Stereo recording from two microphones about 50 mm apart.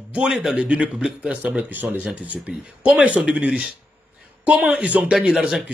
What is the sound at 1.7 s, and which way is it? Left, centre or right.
A man's voice, right.